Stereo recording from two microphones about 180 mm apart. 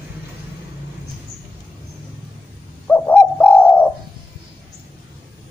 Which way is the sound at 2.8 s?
10° left (ahead or behind).